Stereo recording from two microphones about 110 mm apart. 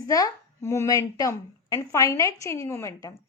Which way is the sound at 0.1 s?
30° left (ahead or behind).